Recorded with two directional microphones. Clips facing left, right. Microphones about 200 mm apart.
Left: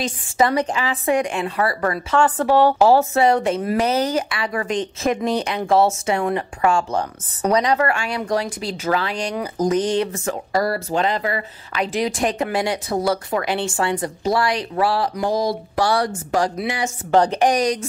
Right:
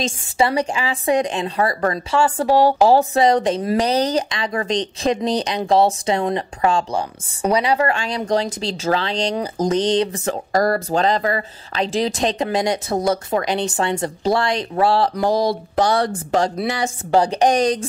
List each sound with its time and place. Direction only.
0.4 s speech: 10° right (ahead or behind)
6.9 s speech: 10° right (ahead or behind)
7.8 s speech: 20° right (ahead or behind)
10.2 s speech: 45° right (ahead or behind)
11.8 s speech: 25° right (ahead or behind)
15.8 s speech: 20° right (ahead or behind)
16.6 s speech: 35° right (ahead or behind)
17.1 s speech: 10° right (ahead or behind)
17.5 s speech: 25° right (ahead or behind)